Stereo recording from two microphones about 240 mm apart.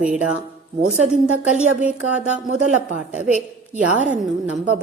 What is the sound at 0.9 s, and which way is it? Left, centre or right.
Speech, right.